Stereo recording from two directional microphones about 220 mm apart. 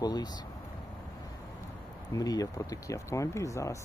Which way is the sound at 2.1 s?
15° left (ahead or behind).